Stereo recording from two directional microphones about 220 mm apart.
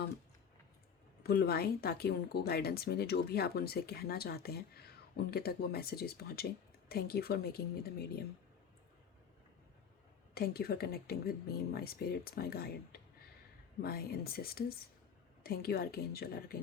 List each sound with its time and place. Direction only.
1.2 s a woman's voice: 45° left (ahead or behind)
10.3 s a woman's voice: 45° left (ahead or behind)